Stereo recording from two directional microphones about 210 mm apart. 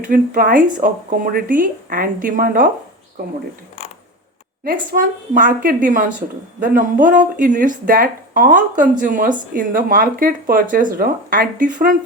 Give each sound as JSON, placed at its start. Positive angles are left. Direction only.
{"t": 0.0, "sound": "speech", "side_deg": -40}
{"t": 4.6, "sound": "speech", "side_deg": -40}